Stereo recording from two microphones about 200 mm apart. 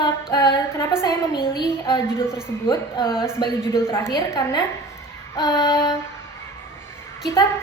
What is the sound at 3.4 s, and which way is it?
A woman's voice, 15° left (ahead or behind).